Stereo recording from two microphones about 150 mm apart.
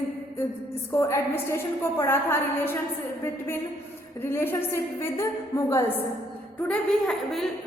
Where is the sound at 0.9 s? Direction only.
20° left (ahead or behind).